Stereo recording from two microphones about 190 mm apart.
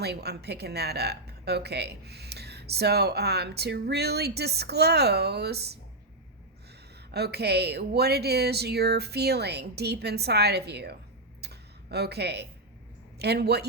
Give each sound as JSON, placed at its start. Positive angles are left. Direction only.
{"t": 0.0, "sound": "speech", "side_deg": -60}
{"t": 7.1, "sound": "speech", "side_deg": -55}
{"t": 11.3, "sound": "a sound", "side_deg": -60}
{"t": 13.1, "sound": "speech", "side_deg": -60}